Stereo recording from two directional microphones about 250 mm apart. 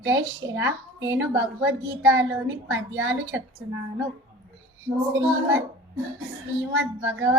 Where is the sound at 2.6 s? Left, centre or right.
Right.